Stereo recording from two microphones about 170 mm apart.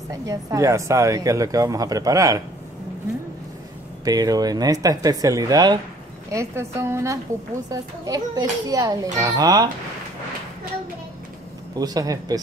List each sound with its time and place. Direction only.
0.1 s speech: 20° right (ahead or behind)
4.0 s a woman's voice: 20° right (ahead or behind)
11.7 s speech: 20° right (ahead or behind)